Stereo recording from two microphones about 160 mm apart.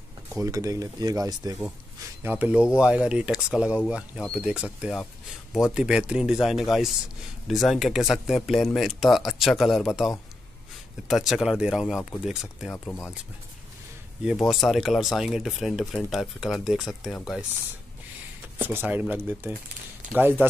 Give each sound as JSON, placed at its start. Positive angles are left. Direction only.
{"t": 0.4, "sound": "speech", "side_deg": -20}
{"t": 2.2, "sound": "speech", "side_deg": -10}
{"t": 14.5, "sound": "speech", "side_deg": 0}
{"t": 18.6, "sound": "speech", "side_deg": -10}